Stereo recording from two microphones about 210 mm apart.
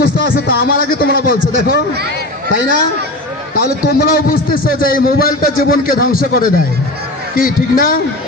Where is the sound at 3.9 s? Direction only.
45° left (ahead or behind).